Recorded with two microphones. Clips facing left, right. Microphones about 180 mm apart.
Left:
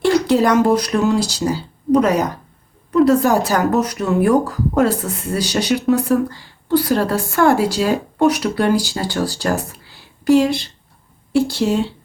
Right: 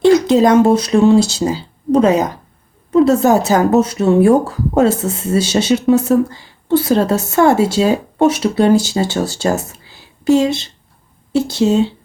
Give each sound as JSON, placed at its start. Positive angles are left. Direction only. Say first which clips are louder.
{"t": 0.0, "sound": "a woman's voice", "louder": "right 5 dB", "side_deg": -20}